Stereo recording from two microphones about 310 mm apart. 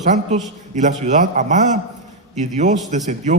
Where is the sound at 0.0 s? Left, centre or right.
Right.